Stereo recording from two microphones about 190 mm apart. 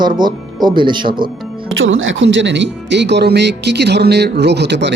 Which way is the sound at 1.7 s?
90° right.